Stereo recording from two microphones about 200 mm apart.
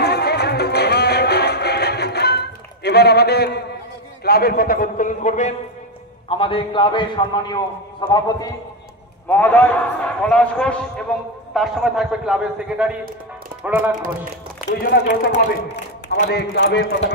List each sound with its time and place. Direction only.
0.0 s music: 55° left (ahead or behind)
4.2 s a man's voice: 50° left (ahead or behind)
6.2 s a man's voice: 25° left (ahead or behind)
9.3 s a man's voice: 10° left (ahead or behind); by 13.9 s 10° right (ahead or behind)
14.7 s a man's voice: 55° left (ahead or behind)